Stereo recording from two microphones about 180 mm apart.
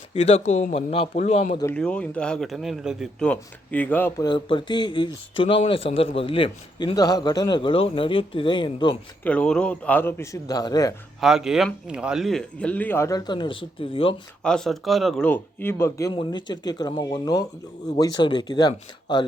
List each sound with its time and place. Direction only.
0.1 s a man's voice: 35° left (ahead or behind)
1.7 s speech: 5° left (ahead or behind)
4.3 s a man's voice: 25° left (ahead or behind)
9.2 s speech: 5° left (ahead or behind)
11.2 s speech: centre (ahead or behind); by 14.2 s 30° left (ahead or behind)
14.4 s a man's voice: 5° left (ahead or behind); by 19.2 s 25° left (ahead or behind)